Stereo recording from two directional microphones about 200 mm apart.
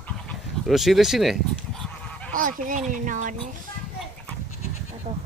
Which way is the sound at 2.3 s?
40° right (ahead or behind).